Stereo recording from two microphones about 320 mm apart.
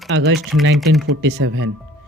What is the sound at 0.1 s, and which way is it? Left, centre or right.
Speech, right.